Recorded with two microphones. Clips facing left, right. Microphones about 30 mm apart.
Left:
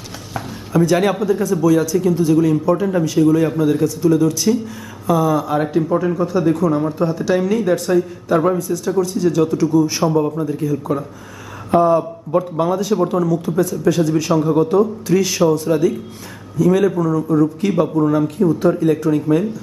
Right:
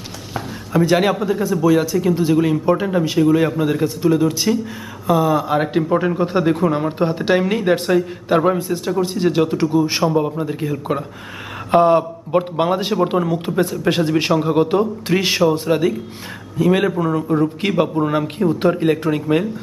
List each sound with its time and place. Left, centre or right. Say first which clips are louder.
0.7 s speech: even; right
2.9 s speech: left 2 dB; right
5.7 s speech: even; right
11.7 s a man's voice: right 1 dB; right